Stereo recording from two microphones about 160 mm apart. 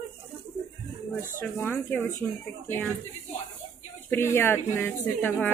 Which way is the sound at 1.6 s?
15° left (ahead or behind).